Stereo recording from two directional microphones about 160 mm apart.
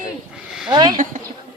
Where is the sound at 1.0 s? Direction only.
60° right (ahead or behind).